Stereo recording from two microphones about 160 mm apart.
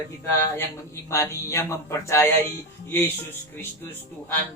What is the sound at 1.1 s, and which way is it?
Speech, 20° left (ahead or behind).